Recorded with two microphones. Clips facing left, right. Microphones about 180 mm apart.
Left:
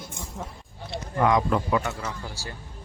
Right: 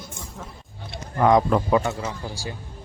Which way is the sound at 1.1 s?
35° right (ahead or behind).